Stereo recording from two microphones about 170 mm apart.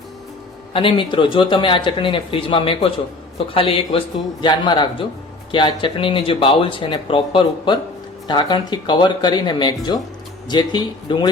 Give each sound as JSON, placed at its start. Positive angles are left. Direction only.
{"t": 0.7, "sound": "speech", "side_deg": 30}